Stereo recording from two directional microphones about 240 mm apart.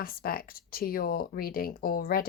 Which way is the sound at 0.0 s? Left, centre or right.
Left.